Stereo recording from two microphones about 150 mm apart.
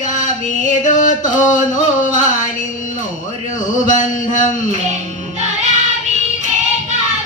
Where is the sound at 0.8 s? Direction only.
55° left (ahead or behind).